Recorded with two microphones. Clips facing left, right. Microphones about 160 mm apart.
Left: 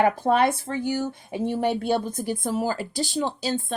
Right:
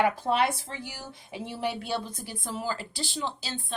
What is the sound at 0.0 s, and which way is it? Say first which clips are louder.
Speech: left 5 dB; 50° left (ahead or behind).